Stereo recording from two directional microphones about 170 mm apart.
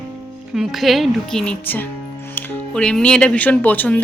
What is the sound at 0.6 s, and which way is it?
Speech, centre (ahead or behind).